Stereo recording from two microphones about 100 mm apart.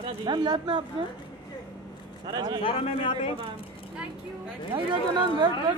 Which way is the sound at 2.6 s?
65° left (ahead or behind).